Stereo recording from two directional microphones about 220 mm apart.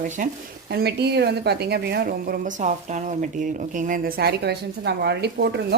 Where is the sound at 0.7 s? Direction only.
50° right (ahead or behind).